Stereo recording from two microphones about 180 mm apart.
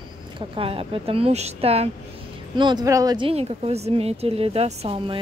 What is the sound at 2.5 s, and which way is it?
Speech, 25° right (ahead or behind).